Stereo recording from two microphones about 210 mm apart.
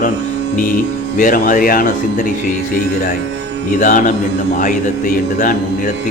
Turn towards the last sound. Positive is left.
turn(degrees=40)  # may be behind; listen again after turning